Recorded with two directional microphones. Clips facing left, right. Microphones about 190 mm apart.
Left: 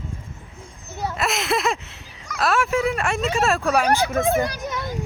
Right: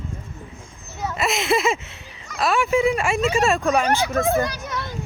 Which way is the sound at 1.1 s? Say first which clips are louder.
Right 3 dB; centre (ahead or behind).